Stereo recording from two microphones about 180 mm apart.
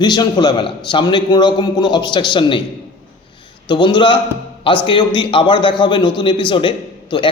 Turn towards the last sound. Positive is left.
turn(degrees=25)  # may be behind; listen again after turning